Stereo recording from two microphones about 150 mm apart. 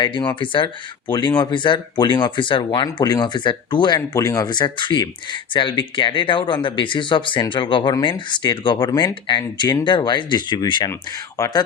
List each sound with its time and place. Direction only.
0.0 s speech: 30° left (ahead or behind)